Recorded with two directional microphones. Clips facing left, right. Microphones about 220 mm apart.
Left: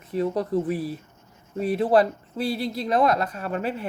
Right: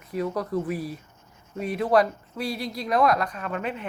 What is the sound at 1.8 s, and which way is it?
Speech, 30° left (ahead or behind).